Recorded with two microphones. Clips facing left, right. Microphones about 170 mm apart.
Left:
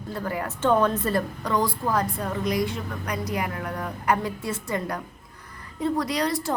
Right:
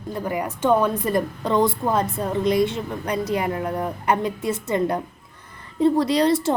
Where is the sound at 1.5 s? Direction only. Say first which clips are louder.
Right 6 dB; 25° right (ahead or behind).